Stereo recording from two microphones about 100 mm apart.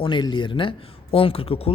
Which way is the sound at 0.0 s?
50° left (ahead or behind).